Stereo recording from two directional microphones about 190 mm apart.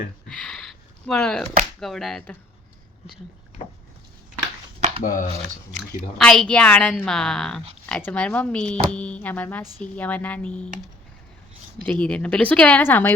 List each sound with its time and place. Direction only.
0.3 s a sound: 5° left (ahead or behind)
1.8 s a woman's voice: centre (ahead or behind)
5.0 s speech: 45° left (ahead or behind)
6.1 s a woman's voice: centre (ahead or behind)
11.8 s speech: 5° left (ahead or behind)